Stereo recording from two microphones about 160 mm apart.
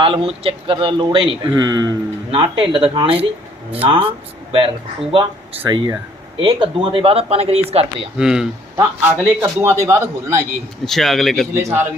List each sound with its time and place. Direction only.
0.0 s speech: 35° right (ahead or behind)
5.1 s speech: 30° right (ahead or behind)
8.2 s a man's voice: 5° right (ahead or behind)
10.8 s speech: centre (ahead or behind)
11.5 s a man's voice: 15° right (ahead or behind)